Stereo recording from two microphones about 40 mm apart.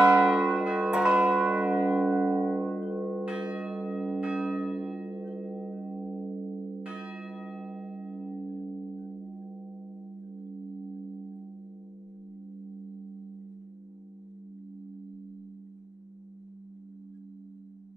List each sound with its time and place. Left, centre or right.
0.0 s church bell: right
1.9 s music: centre
3.0 s church bell: centre
3.3 s church bell: right
4.2 s church bell: right
5.0 s singing bowl: right
5.3 s singing bowl: centre
6.8 s church bell: right
7.2 s bell: centre
8.7 s singing bowl: centre
10.9 s singing bowl: centre